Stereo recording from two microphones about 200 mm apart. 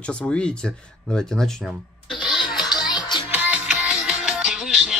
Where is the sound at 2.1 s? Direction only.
25° left (ahead or behind).